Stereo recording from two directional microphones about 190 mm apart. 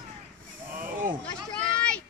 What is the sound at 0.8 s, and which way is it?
Snake, 45° right (ahead or behind).